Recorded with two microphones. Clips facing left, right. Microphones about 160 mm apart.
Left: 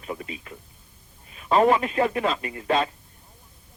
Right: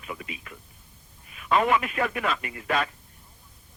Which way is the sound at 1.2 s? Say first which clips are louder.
Left 4 dB; 30° left (ahead or behind).